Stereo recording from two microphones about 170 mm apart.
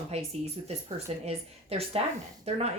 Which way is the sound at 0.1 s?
40° right (ahead or behind).